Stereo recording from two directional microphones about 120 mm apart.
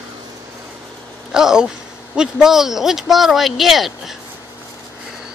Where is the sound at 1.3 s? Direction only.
5° right (ahead or behind).